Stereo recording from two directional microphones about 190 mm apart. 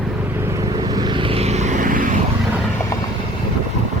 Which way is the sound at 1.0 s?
25° right (ahead or behind).